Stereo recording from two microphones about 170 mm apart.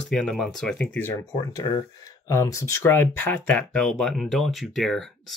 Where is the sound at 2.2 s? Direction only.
15° left (ahead or behind).